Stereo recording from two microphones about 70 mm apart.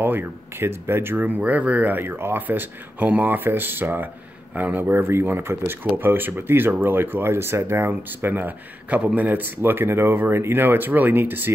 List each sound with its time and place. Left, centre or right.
0.0 s speech: right
1.2 s speech: right